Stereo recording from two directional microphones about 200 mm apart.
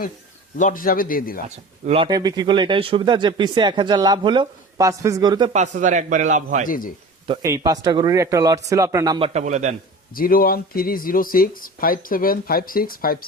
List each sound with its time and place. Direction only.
0.6 s speech: 45° left (ahead or behind)
1.5 s speech: 30° right (ahead or behind)
5.5 s a man's voice: 35° right (ahead or behind)
6.7 s speech: 45° left (ahead or behind)
7.4 s speech: 15° right (ahead or behind); by 9.7 s 35° right (ahead or behind)
10.2 s speech: 45° left (ahead or behind)